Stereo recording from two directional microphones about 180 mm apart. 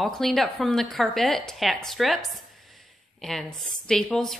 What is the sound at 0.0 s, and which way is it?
Speech, centre (ahead or behind).